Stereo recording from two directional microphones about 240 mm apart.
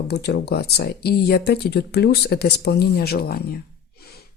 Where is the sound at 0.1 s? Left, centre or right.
Left.